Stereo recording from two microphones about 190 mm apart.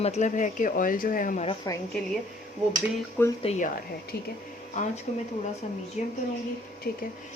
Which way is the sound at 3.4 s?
35° left (ahead or behind).